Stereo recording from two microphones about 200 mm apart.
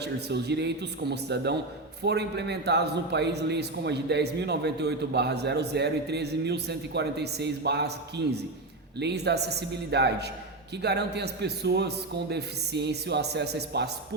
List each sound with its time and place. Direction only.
0.0 s a man's voice: 55° right (ahead or behind)